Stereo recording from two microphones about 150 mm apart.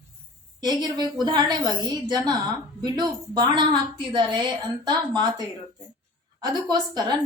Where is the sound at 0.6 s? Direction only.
30° right (ahead or behind).